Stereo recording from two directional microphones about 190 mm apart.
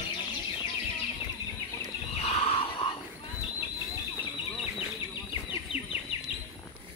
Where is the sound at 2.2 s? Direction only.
30° left (ahead or behind).